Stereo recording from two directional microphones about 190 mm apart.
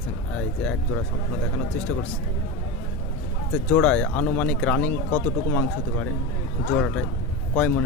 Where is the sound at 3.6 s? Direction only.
5° left (ahead or behind).